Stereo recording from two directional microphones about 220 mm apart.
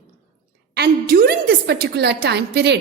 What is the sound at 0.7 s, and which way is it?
A woman's voice, 45° right (ahead or behind).